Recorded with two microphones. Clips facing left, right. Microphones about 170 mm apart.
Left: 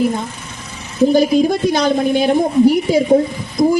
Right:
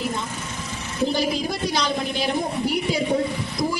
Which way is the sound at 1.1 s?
50° left (ahead or behind).